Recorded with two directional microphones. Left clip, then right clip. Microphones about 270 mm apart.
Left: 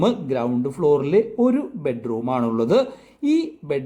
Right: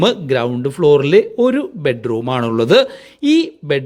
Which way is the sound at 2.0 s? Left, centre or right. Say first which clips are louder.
Right 5 dB; right.